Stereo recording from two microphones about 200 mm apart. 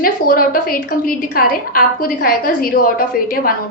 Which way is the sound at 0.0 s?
45° left (ahead or behind).